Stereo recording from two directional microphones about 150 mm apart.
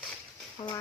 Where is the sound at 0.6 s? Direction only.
50° left (ahead or behind).